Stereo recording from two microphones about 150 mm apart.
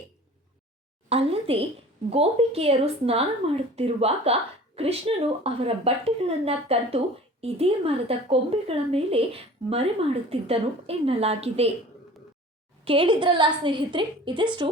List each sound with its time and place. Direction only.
1.1 s speech: 40° right (ahead or behind)
12.8 s speech: 35° right (ahead or behind)